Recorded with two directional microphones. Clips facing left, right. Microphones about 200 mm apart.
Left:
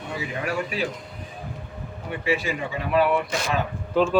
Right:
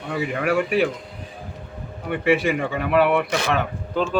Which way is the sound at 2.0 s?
60° right (ahead or behind).